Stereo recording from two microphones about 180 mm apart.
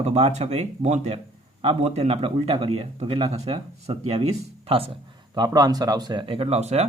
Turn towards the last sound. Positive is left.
turn(degrees=-35)  # may be behind; listen again after turning